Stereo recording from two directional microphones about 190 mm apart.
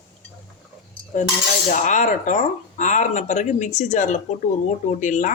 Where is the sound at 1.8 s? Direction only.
40° left (ahead or behind).